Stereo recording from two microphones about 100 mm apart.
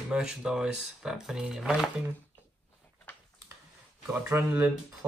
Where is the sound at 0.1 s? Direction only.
5° right (ahead or behind).